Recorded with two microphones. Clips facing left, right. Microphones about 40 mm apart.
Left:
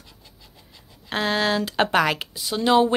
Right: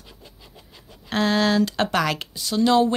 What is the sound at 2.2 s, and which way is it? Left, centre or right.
Speech, centre.